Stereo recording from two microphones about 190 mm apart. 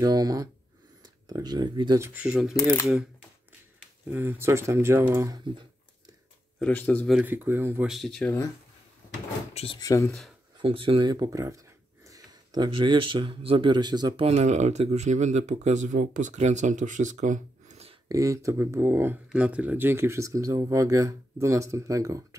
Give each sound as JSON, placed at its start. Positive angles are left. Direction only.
{"t": 0.0, "sound": "speech", "side_deg": -20}
{"t": 2.5, "sound": "speech", "side_deg": 15}
{"t": 4.1, "sound": "speech", "side_deg": -10}
{"t": 6.6, "sound": "speech", "side_deg": 10}
{"t": 7.2, "sound": "speech", "side_deg": -10}
{"t": 7.9, "sound": "speech", "side_deg": 0}
{"t": 9.5, "sound": "speech", "side_deg": 30}
{"t": 9.8, "sound": "speech", "side_deg": 15}
{"t": 10.6, "sound": "speech", "side_deg": -25}
{"t": 18.0, "sound": "speech", "side_deg": -15}